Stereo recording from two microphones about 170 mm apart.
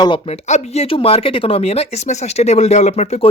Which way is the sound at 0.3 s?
40° left (ahead or behind).